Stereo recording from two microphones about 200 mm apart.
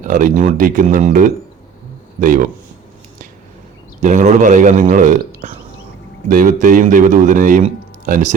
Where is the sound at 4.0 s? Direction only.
40° right (ahead or behind).